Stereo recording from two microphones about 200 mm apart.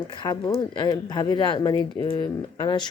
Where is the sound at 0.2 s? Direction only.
20° left (ahead or behind).